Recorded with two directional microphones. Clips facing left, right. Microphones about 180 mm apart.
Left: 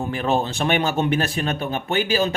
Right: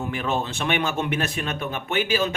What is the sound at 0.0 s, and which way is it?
Speech, 35° left (ahead or behind).